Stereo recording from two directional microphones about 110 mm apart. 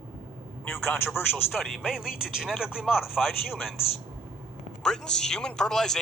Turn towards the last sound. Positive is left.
turn(degrees=5)  # may be behind; listen again after turning